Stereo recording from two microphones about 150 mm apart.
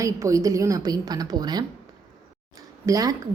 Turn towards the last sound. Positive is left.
turn(degrees=-25)  # may be behind; listen again after turning